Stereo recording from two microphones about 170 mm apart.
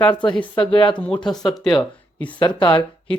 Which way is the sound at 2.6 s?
30° left (ahead or behind).